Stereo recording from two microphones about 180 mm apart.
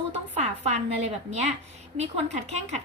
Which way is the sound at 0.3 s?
40° right (ahead or behind).